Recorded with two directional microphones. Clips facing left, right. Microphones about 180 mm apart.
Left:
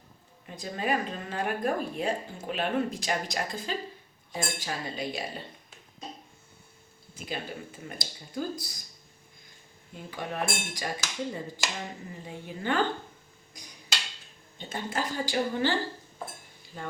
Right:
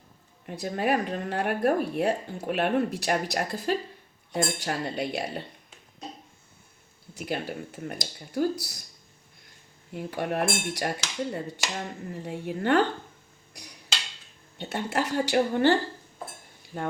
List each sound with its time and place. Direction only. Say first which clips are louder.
0.4 s speech: right 4 dB; 65° right (ahead or behind)
4.6 s speech: right 4 dB; 65° right (ahead or behind)
7.1 s a woman's voice: right 5 dB; 70° right (ahead or behind)
9.9 s speech: right 7 dB; 65° right (ahead or behind)
13.5 s tick-tock: right 3 dB; 70° right (ahead or behind)
14.6 s a woman's voice: right 4 dB; 70° right (ahead or behind)
16.7 s speech: right 7 dB; 50° right (ahead or behind)